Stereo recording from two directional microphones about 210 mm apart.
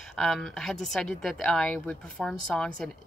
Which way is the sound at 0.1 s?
Centre (ahead or behind).